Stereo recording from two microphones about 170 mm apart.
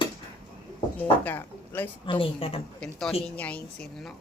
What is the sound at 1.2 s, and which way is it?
Speech, 10° left (ahead or behind).